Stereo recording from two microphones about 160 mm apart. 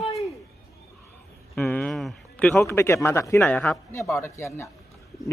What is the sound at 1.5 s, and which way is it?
A man's voice, 10° left (ahead or behind).